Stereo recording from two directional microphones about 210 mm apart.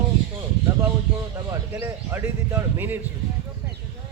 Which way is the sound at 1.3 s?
10° right (ahead or behind).